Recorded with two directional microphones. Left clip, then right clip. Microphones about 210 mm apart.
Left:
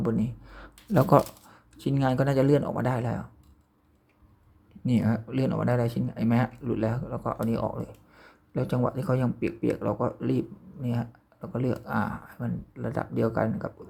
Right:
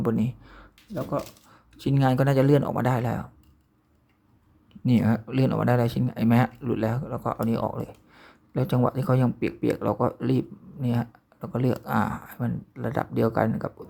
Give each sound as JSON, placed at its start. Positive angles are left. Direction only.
{"t": 0.0, "sound": "speech", "side_deg": -10}
{"t": 0.9, "sound": "speech", "side_deg": 25}
{"t": 1.5, "sound": "speech", "side_deg": -5}
{"t": 4.9, "sound": "speech", "side_deg": -10}